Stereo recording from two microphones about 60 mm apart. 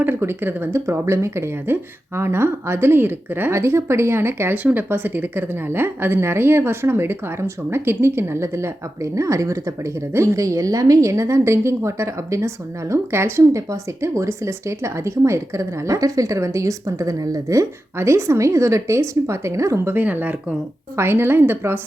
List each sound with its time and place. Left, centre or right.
0.0 s speech: right
3.6 s speech: right
4.5 s a woman's voice: right
9.1 s a woman's voice: right
14.0 s a woman's voice: right
17.9 s a woman's voice: right
19.9 s a woman's voice: right
20.9 s speech: right